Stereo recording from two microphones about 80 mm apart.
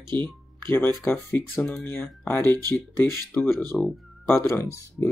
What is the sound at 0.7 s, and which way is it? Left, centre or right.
Speech, left.